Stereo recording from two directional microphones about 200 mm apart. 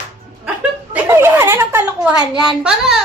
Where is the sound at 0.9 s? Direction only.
10° right (ahead or behind).